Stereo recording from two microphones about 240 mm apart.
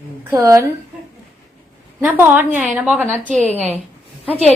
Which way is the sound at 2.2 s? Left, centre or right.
Centre.